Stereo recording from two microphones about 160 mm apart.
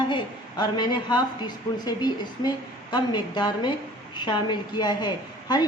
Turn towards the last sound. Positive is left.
turn(degrees=25)  # may be behind; listen again after turning